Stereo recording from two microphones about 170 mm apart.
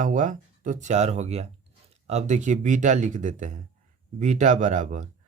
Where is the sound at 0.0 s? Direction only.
50° right (ahead or behind).